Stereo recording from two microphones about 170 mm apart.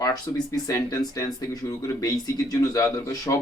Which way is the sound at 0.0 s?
25° left (ahead or behind).